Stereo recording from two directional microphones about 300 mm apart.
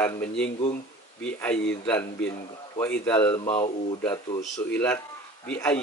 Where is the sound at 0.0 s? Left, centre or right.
Centre.